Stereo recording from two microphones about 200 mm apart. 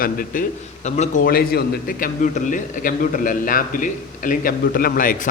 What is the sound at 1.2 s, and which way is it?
A man's voice, 50° left (ahead or behind).